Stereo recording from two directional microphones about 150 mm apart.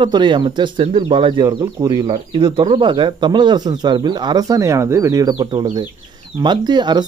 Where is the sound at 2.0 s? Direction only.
40° right (ahead or behind).